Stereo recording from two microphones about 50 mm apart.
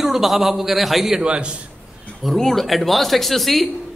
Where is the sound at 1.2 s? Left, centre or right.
Centre.